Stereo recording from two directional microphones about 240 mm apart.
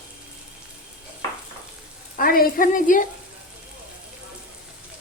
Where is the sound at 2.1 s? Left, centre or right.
Left.